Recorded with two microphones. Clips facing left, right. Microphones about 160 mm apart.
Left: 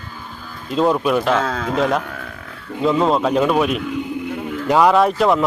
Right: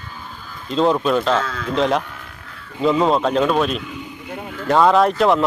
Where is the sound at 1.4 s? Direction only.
45° left (ahead or behind).